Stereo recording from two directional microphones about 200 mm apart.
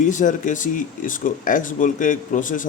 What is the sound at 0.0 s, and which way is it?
Speech, 40° left (ahead or behind).